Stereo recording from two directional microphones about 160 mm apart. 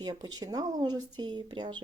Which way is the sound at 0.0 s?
25° right (ahead or behind).